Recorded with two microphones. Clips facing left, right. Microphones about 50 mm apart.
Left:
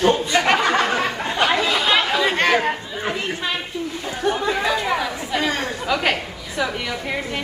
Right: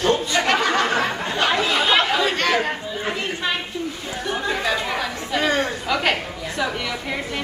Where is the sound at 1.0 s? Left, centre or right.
Centre.